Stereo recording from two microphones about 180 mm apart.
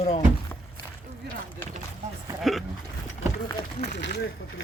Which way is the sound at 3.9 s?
75° left (ahead or behind).